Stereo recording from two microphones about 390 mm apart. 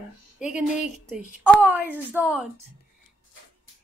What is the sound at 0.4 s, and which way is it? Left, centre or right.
A woman's voice, centre.